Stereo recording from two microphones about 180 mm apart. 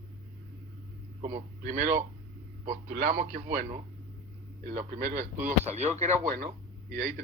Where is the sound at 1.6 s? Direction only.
45° right (ahead or behind).